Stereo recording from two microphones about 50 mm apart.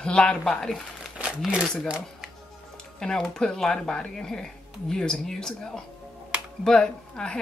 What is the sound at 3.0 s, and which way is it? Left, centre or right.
Speech, centre.